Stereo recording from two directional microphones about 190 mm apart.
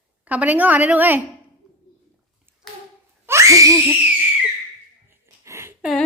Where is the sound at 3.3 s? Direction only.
15° right (ahead or behind).